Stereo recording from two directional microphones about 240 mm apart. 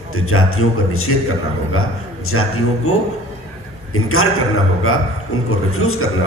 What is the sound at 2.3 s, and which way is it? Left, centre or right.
A man's voice, left.